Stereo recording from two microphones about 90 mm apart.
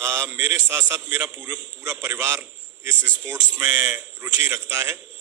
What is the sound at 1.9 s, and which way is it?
A man's voice, 30° right (ahead or behind).